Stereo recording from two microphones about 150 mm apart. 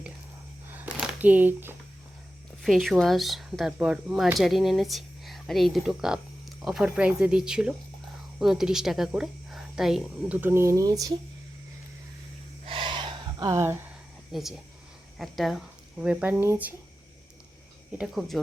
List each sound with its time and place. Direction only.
0.7 s a sound: 10° right (ahead or behind)
2.6 s speech: centre (ahead or behind); by 11.1 s 25° right (ahead or behind)
12.7 s a sound: 30° right (ahead or behind)
13.6 s speech: 15° right (ahead or behind)
14.3 s speech: centre (ahead or behind)
17.9 s speech: centre (ahead or behind)